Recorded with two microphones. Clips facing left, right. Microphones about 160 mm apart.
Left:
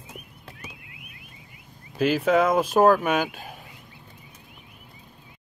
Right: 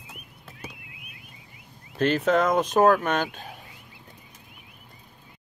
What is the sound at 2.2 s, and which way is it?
Speech, 5° left (ahead or behind).